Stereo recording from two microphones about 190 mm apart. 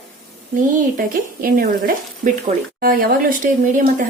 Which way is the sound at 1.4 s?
50° right (ahead or behind).